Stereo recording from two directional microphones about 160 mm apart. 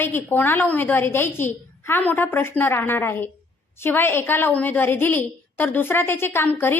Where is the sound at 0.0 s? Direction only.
15° left (ahead or behind).